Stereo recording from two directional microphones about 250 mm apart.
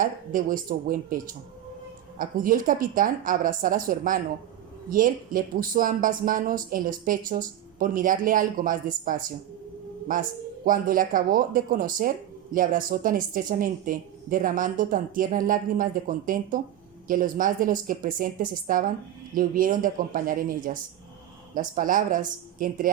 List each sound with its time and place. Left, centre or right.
0.0 s speech: right
10.7 s speech: right